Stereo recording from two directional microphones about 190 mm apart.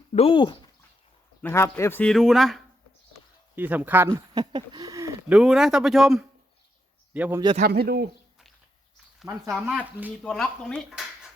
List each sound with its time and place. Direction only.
0.1 s speech: 30° left (ahead or behind)
1.4 s speech: 15° left (ahead or behind); by 5.1 s 15° right (ahead or behind)
5.3 s speech: centre (ahead or behind)
7.7 s speech: 55° right (ahead or behind)
9.5 s speech: 5° right (ahead or behind)